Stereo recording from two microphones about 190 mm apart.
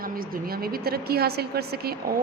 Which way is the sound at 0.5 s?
50° right (ahead or behind).